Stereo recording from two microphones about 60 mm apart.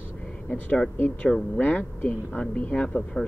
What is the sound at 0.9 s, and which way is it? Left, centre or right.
A man's voice, left.